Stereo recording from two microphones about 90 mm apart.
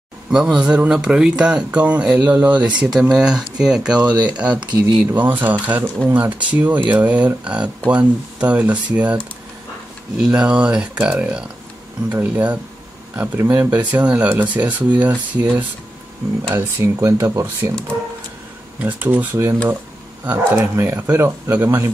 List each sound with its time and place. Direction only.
0.3 s speech: 10° right (ahead or behind)
16.4 s speech: 30° right (ahead or behind)
18.8 s speech: 20° right (ahead or behind)